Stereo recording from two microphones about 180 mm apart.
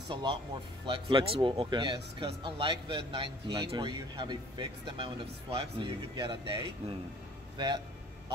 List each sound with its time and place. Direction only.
0.1 s speech: 25° right (ahead or behind)